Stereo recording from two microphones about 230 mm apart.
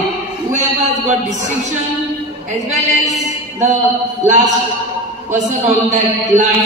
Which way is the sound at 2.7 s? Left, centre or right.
Right.